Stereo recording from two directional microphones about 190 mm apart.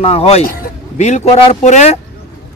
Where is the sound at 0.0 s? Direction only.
30° left (ahead or behind).